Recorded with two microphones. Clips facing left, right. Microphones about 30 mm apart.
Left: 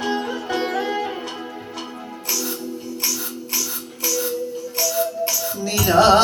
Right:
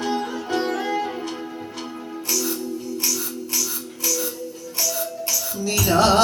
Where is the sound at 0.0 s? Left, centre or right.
Centre.